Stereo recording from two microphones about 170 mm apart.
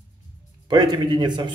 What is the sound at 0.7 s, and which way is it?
Speech, 25° right (ahead or behind).